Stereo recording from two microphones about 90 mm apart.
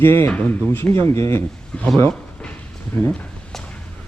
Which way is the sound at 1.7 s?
10° left (ahead or behind).